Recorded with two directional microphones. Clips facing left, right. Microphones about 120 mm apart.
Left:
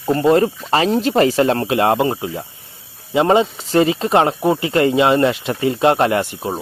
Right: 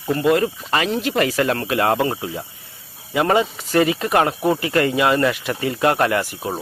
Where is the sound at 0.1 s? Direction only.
35° left (ahead or behind).